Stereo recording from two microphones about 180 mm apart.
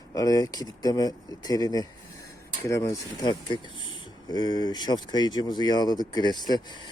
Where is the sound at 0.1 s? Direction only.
20° left (ahead or behind).